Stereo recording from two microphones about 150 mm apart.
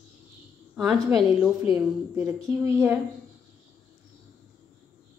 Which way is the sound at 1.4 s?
20° right (ahead or behind).